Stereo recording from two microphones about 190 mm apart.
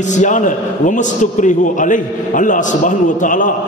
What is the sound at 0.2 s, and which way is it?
A man's voice, 40° left (ahead or behind).